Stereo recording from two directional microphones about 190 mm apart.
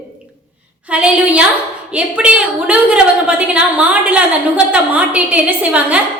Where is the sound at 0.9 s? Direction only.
5° right (ahead or behind).